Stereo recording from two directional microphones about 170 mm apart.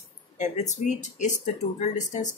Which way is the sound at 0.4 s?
45° left (ahead or behind).